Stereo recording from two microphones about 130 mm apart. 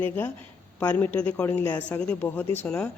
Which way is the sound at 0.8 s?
15° left (ahead or behind).